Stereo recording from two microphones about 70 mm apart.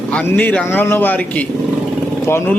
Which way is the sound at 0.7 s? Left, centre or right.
Left.